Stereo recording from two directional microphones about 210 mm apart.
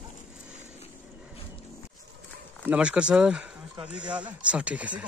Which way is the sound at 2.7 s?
5° right (ahead or behind).